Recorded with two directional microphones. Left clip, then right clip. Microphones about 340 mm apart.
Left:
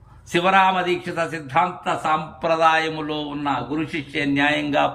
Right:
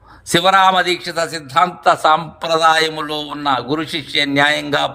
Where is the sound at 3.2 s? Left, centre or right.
Centre.